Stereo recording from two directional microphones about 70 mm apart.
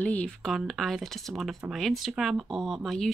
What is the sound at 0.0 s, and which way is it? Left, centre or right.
Speech, left.